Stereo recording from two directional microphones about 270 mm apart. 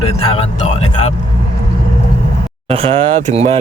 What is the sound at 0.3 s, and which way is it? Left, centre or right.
Vehicle, left.